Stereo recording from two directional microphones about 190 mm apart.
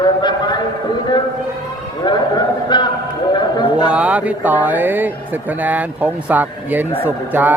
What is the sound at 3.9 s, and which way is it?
Speech, 5° right (ahead or behind).